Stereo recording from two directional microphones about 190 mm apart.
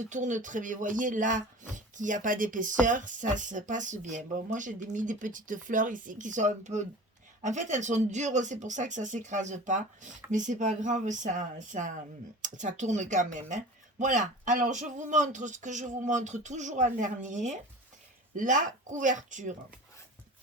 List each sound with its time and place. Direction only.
0.0 s speech: 40° right (ahead or behind)